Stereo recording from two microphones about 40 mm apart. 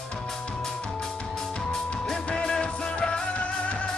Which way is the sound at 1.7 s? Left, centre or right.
Centre.